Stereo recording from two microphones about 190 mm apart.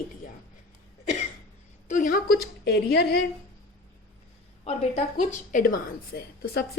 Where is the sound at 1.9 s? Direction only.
45° left (ahead or behind).